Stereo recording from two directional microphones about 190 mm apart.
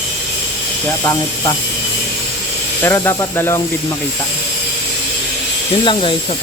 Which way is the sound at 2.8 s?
15° left (ahead or behind).